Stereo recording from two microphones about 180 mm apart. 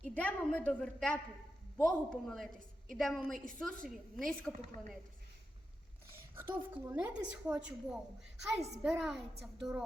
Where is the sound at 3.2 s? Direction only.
45° right (ahead or behind).